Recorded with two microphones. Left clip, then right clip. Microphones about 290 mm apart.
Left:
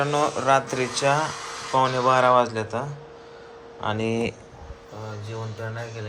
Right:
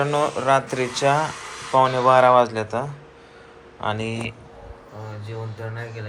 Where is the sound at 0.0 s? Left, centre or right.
Centre.